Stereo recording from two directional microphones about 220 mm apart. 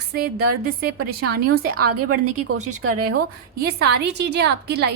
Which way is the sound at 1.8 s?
85° right.